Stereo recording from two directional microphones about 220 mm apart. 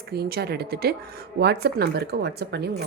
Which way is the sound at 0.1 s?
45° right (ahead or behind).